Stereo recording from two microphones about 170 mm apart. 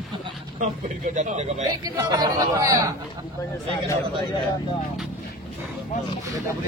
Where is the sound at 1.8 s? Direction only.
20° right (ahead or behind).